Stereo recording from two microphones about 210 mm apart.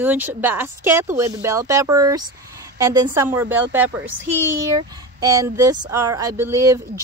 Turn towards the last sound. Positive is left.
turn(degrees=-15)  # may be behind; listen again after turning